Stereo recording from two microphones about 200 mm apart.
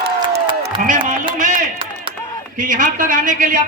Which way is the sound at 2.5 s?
40° right (ahead or behind).